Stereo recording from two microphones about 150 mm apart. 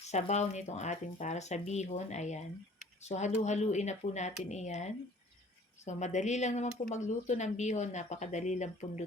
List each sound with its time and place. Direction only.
0.0 s speech: 50° left (ahead or behind)